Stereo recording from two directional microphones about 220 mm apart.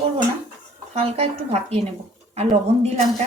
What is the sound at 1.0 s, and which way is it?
Speech, 30° right (ahead or behind).